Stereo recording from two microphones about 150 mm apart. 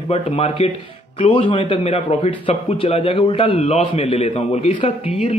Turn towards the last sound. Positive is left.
turn(degrees=45)  # may be behind; listen again after turning